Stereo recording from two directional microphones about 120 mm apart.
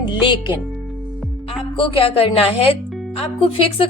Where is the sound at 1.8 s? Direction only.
45° left (ahead or behind).